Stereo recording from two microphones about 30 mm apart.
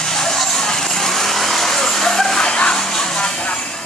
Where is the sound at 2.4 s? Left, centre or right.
Left.